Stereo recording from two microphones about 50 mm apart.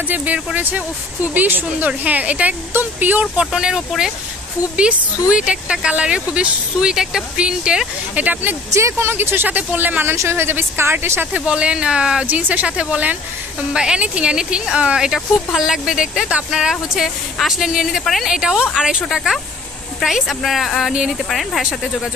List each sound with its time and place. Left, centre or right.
0.1 s speech: right
3.3 s speech: centre
8.1 s speech: right
8.6 s speech: right
9.0 s speech: right
10.1 s speech: right
11.3 s speech: right
12.3 s speech: right
13.7 s speech: centre
15.0 s speech: centre
19.0 s a woman's voice: centre
20.9 s speech: centre
21.3 s a woman's voice: centre